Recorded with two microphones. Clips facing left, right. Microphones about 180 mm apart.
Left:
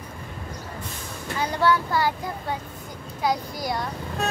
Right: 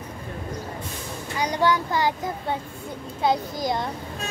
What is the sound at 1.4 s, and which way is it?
A child's voice, 15° right (ahead or behind).